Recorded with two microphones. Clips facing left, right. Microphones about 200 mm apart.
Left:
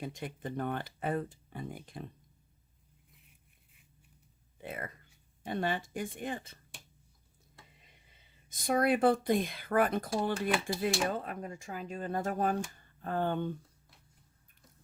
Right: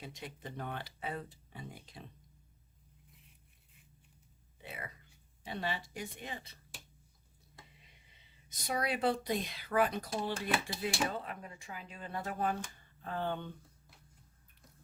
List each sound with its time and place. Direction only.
0.0 s speech: 50° left (ahead or behind)
4.5 s speech: 50° left (ahead or behind)
8.4 s speech: 50° left (ahead or behind)